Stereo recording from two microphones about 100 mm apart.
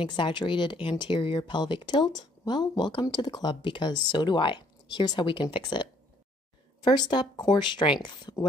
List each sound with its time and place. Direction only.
0.0 s speech: 50° left (ahead or behind)